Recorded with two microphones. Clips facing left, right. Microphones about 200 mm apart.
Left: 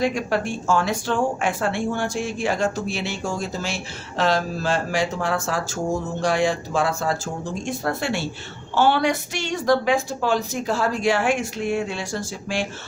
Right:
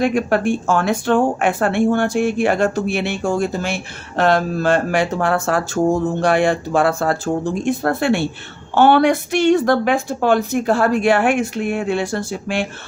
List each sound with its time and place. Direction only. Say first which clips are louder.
0.0 s a woman's voice: right 6 dB; 60° right (ahead or behind)